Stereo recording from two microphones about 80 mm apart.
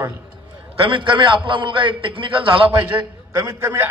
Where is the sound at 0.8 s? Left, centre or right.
Right.